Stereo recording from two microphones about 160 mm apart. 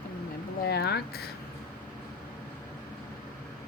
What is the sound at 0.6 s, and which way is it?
Speech, 85° left.